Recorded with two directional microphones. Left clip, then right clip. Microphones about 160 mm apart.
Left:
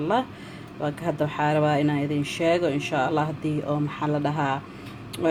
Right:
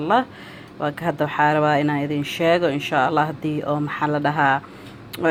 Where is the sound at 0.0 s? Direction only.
15° right (ahead or behind).